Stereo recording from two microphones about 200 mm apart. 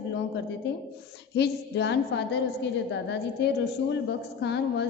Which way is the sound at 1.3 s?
55° left (ahead or behind).